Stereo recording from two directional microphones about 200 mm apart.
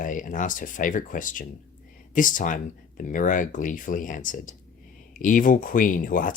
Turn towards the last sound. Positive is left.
turn(degrees=45)  # may be behind; listen again after turning